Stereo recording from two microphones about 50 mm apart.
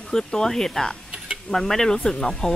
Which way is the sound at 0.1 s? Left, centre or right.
Centre.